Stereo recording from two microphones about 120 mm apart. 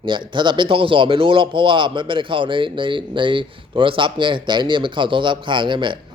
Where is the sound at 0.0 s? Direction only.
40° right (ahead or behind).